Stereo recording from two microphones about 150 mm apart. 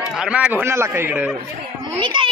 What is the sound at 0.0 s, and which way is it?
A man's voice, 5° right (ahead or behind).